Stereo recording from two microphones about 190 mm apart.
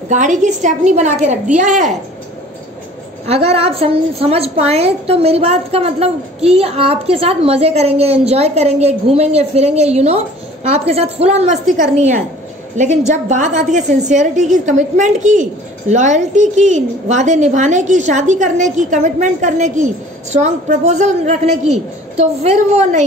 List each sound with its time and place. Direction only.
0.1 s a woman's voice: 40° right (ahead or behind)
3.3 s a woman's voice: 30° right (ahead or behind)